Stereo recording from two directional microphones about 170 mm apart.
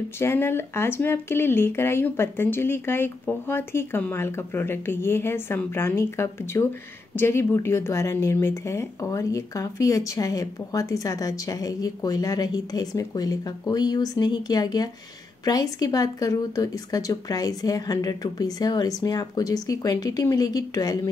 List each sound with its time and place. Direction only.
0.2 s a woman's voice: 15° left (ahead or behind)